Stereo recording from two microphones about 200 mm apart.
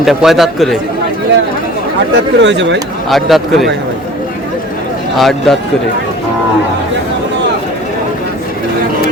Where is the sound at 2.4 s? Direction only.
60° right (ahead or behind).